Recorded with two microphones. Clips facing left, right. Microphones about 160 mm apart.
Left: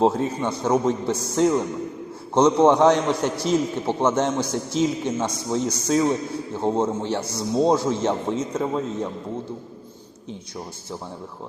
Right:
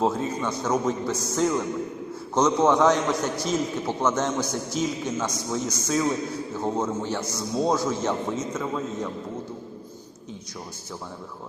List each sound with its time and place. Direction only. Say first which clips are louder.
0.0 s a man's voice: left 4 dB; 30° left (ahead or behind)